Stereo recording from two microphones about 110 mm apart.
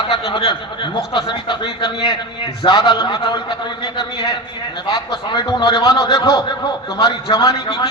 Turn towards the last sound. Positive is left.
turn(degrees=45)  # may be behind; listen again after turning